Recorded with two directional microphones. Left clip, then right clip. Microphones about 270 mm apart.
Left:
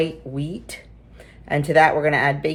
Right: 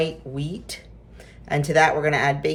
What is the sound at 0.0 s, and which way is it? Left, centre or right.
Speech, centre.